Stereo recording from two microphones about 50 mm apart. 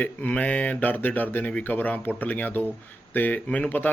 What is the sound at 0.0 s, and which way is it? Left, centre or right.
A man's voice, left.